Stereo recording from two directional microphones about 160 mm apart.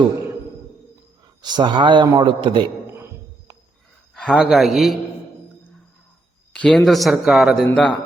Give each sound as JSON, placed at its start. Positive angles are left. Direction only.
{"t": 1.4, "sound": "speech", "side_deg": -25}
{"t": 4.1, "sound": "a sound", "side_deg": 5}
{"t": 4.4, "sound": "speech", "side_deg": 0}
{"t": 6.5, "sound": "speech", "side_deg": 5}
{"t": 7.7, "sound": "a man's voice", "side_deg": 10}